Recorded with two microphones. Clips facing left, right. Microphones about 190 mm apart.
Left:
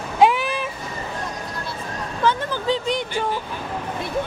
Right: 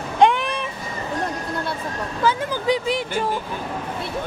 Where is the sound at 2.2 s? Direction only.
10° right (ahead or behind).